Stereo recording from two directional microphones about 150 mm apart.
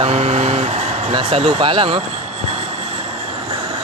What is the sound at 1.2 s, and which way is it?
Vehicle, 40° right (ahead or behind).